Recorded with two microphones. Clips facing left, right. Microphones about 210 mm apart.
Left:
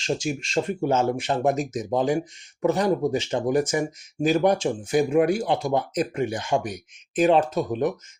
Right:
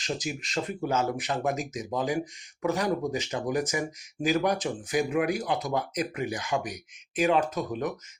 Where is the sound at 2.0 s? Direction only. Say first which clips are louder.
Left 5 dB; 25° left (ahead or behind).